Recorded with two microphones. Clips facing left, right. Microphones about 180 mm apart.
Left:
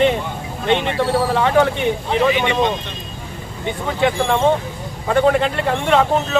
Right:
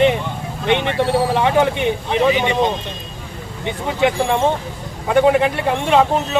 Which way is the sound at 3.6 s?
15° right (ahead or behind).